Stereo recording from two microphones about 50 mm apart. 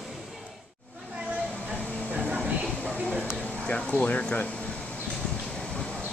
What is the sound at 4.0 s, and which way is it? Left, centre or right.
Speech, left.